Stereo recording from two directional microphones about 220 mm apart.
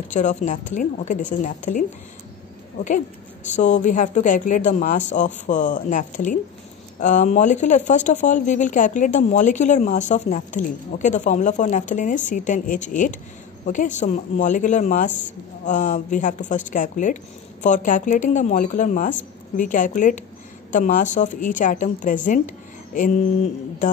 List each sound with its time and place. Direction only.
0.1 s speech: 35° left (ahead or behind)
3.4 s speech: 35° left (ahead or behind)